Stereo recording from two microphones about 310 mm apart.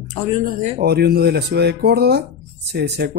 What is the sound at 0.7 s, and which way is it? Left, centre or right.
Speech, right.